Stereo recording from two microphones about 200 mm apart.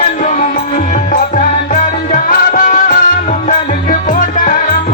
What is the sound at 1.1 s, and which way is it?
Music, 40° left (ahead or behind).